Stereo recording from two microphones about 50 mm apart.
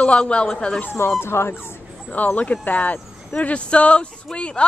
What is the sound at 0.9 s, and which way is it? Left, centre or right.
Speech, left.